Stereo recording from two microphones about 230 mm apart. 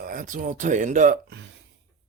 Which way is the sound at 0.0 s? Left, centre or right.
Right.